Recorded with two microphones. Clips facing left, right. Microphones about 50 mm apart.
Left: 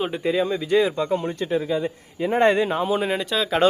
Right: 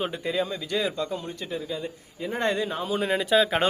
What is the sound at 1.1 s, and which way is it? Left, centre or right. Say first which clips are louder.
Speech: left 9 dB; left.